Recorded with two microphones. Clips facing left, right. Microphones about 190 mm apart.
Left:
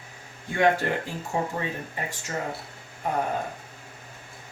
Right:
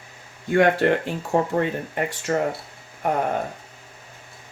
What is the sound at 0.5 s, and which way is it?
Speech, 65° right (ahead or behind).